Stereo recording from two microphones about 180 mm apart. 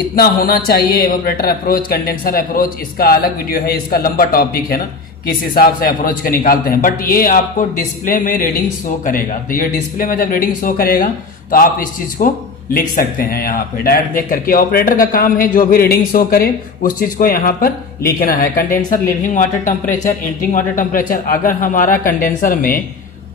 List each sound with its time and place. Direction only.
0.1 s speech: 55° left (ahead or behind)